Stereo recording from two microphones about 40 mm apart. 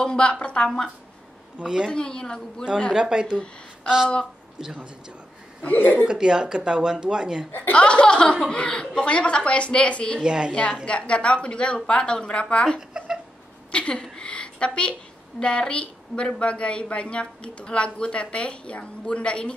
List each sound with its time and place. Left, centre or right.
0.0 s a woman's voice: left
1.6 s a man's voice: centre
1.9 s a woman's voice: left
2.9 s a woman's voice: centre
4.6 s a man's voice: centre
5.7 s speech: left
6.0 s a woman's voice: centre
7.7 s a woman's voice: left
10.2 s a woman's voice: right
10.5 s a woman's voice: left
12.9 s a sound: right
13.7 s a sound: left
15.4 s a woman's voice: left